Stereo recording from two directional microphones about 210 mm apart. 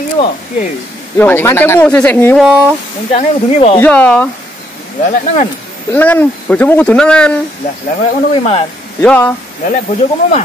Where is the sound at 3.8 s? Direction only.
5° left (ahead or behind).